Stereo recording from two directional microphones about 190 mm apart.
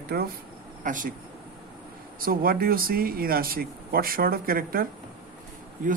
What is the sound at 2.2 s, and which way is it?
Speech, 50° right (ahead or behind).